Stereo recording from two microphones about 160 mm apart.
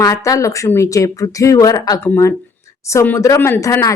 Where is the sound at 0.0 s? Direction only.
20° left (ahead or behind).